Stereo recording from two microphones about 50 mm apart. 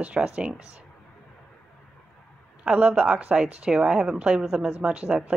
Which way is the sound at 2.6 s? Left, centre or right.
Right.